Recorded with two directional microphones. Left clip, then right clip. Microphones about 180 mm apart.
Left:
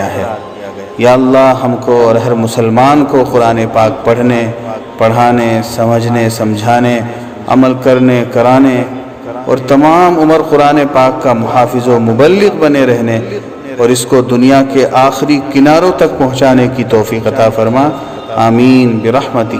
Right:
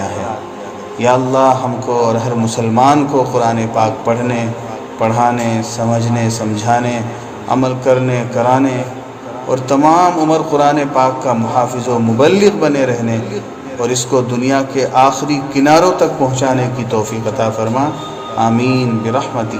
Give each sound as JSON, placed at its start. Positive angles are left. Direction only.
{"t": 0.9, "sound": "a man's voice", "side_deg": 45}